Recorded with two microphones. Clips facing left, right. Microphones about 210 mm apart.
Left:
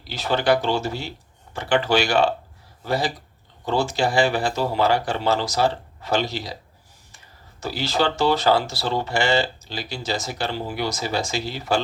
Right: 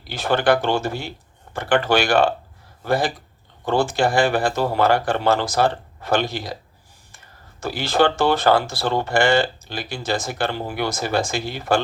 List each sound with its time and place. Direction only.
0.1 s speech: 50° right (ahead or behind)
7.6 s speech: 50° right (ahead or behind)